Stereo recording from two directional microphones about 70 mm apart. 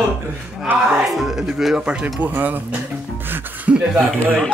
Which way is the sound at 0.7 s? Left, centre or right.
Right.